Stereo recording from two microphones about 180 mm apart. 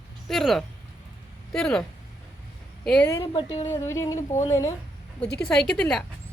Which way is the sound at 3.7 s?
15° left (ahead or behind).